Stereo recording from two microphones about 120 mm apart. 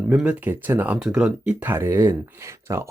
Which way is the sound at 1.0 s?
5° right (ahead or behind).